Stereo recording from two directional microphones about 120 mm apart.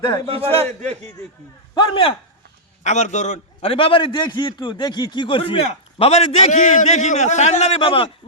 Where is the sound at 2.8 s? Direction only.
80° left.